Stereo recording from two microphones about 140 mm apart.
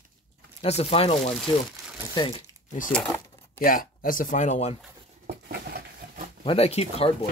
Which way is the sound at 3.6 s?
85° left.